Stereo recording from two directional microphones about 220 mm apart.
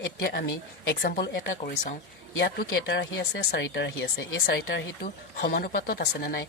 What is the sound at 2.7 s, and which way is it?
Speech, 50° left (ahead or behind).